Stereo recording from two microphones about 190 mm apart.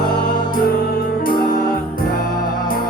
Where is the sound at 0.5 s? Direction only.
50° left (ahead or behind).